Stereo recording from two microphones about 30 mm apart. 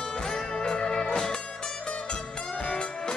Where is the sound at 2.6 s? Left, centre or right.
Left.